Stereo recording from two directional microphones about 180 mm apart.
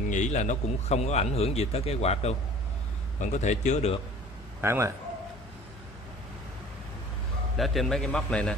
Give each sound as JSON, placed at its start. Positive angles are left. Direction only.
{"t": 0.1, "sound": "a man's voice", "side_deg": 40}
{"t": 4.6, "sound": "a man's voice", "side_deg": -15}
{"t": 7.5, "sound": "a man's voice", "side_deg": 0}